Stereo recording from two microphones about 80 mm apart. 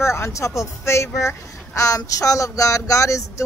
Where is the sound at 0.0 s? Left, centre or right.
Left.